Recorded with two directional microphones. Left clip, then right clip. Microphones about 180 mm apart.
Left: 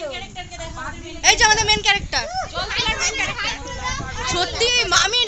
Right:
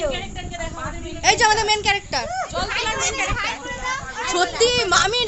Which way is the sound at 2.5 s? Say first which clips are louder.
Left 2 dB; 75° right (ahead or behind).